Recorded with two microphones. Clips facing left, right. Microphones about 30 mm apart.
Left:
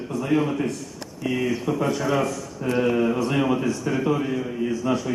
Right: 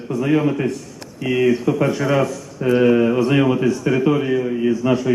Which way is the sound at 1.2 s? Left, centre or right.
Right.